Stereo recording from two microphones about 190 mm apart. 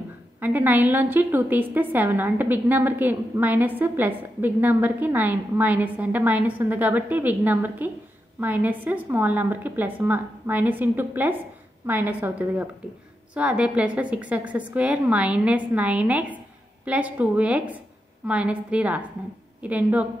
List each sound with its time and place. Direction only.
0.4 s a woman's voice: 10° right (ahead or behind)